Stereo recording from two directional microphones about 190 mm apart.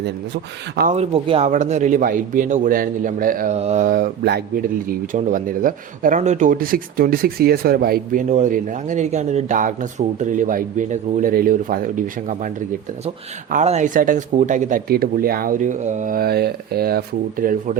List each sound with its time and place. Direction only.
0.9 s a man's voice: 30° right (ahead or behind)
13.5 s a man's voice: 40° right (ahead or behind)